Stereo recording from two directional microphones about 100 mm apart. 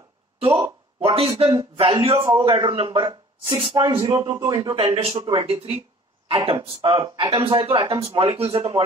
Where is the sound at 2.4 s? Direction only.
55° right (ahead or behind).